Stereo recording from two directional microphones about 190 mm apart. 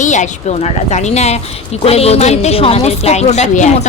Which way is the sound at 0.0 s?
40° left (ahead or behind).